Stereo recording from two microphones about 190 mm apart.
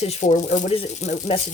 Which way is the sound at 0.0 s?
35° left (ahead or behind).